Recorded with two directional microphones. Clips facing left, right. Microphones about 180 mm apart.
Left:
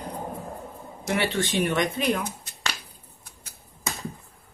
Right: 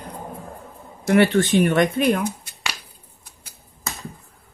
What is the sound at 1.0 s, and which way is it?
Speech, 55° right (ahead or behind).